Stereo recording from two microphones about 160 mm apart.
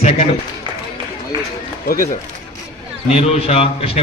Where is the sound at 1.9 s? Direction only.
60° left (ahead or behind).